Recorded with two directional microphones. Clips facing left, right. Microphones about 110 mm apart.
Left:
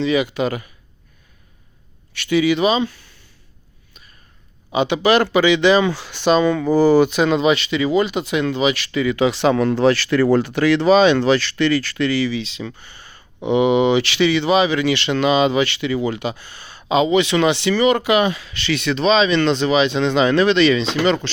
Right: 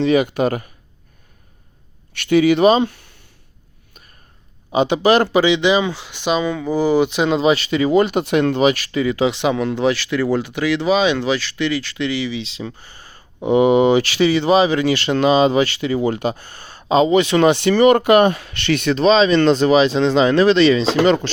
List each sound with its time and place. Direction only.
0.0 s speech: 50° right (ahead or behind)
2.1 s speech: 55° right (ahead or behind)
4.7 s speech: 40° right (ahead or behind)
5.5 s speech: 15° right (ahead or behind)
9.3 s speech: 15° right (ahead or behind); by 21.2 s 40° right (ahead or behind)